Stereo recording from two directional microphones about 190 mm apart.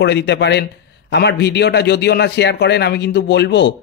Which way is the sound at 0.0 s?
65° left (ahead or behind).